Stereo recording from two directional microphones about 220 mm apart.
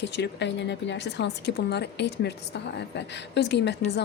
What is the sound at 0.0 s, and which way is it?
Speech, 50° left (ahead or behind).